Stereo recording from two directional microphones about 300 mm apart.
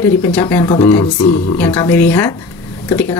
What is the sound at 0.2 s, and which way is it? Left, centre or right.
A woman's voice, centre.